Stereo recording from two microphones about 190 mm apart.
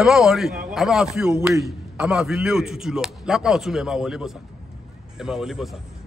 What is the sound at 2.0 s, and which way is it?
A man's voice, 5° right (ahead or behind).